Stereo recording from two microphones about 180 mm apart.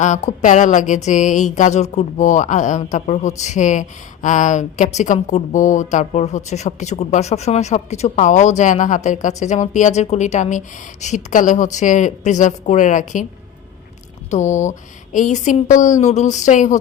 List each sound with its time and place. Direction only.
0.3 s a woman's voice: 45° left (ahead or behind)
14.3 s speech: 40° left (ahead or behind)